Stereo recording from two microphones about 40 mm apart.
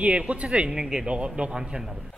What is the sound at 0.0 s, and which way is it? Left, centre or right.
Speech, right.